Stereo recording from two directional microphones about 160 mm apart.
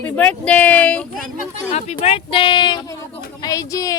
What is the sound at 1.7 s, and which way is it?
A woman's voice, 45° left (ahead or behind).